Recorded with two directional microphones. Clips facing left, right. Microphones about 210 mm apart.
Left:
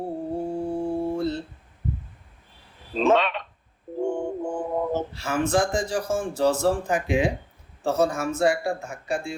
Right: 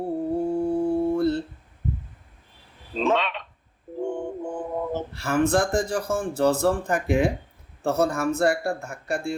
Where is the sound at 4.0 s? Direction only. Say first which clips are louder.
Left 2 dB; 45° left (ahead or behind).